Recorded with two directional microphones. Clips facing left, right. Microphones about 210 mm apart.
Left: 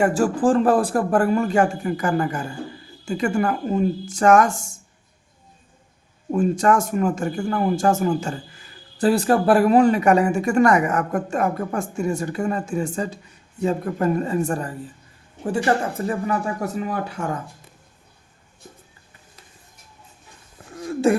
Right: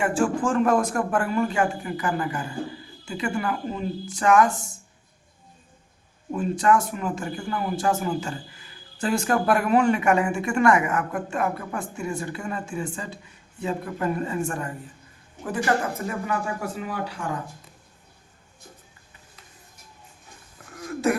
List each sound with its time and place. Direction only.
0.0 s speech: 40° left (ahead or behind)
6.3 s speech: 45° left (ahead or behind)
20.7 s a sound: 30° left (ahead or behind)